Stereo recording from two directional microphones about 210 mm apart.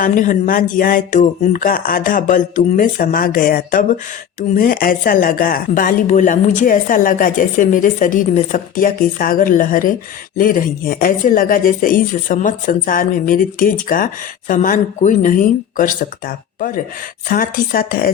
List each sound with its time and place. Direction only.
0.0 s speech: 40° left (ahead or behind)